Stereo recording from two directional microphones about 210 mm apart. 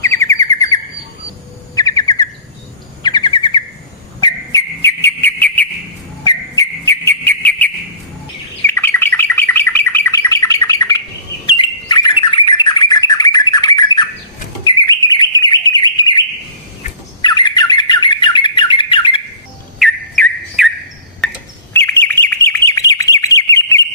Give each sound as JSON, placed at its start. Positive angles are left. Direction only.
{"t": 0.0, "sound": "bird", "side_deg": 15}
{"t": 4.2, "sound": "whistle", "side_deg": 15}
{"t": 8.6, "sound": "bird", "side_deg": 10}
{"t": 17.2, "sound": "bird", "side_deg": 20}
{"t": 19.8, "sound": "bird", "side_deg": 0}